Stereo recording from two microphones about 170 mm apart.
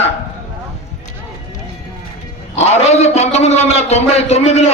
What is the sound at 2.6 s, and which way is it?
A man's voice, 40° left (ahead or behind).